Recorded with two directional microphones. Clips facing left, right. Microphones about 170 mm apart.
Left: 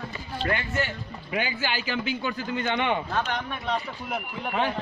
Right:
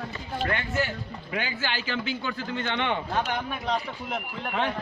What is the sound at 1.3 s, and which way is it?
Speech, 15° left (ahead or behind).